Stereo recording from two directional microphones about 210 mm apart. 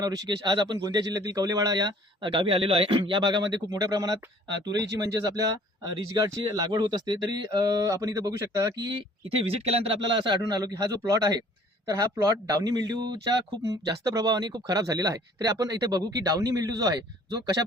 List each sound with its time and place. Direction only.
0.3 s speech: 20° right (ahead or behind)
9.4 s speech: 30° right (ahead or behind)